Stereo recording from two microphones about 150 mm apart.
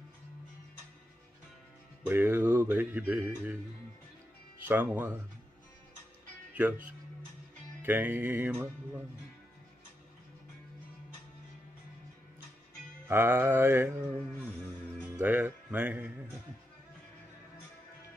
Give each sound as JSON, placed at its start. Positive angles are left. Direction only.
{"t": 2.0, "sound": "speech", "side_deg": -15}
{"t": 4.6, "sound": "speech", "side_deg": -10}
{"t": 6.5, "sound": "speech", "side_deg": -10}
{"t": 13.1, "sound": "speech", "side_deg": -15}
{"t": 15.2, "sound": "speech", "side_deg": -10}